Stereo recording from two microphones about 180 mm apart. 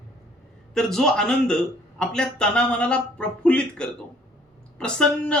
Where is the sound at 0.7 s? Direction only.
5° left (ahead or behind).